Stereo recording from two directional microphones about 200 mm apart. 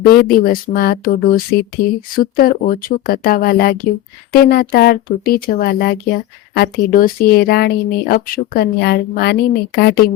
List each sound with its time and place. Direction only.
0.3 s speech: 45° left (ahead or behind)